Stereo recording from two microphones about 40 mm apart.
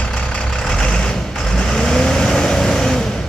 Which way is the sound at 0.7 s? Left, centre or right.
Centre.